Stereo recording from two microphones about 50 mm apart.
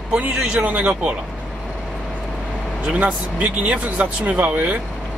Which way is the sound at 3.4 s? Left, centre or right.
Right.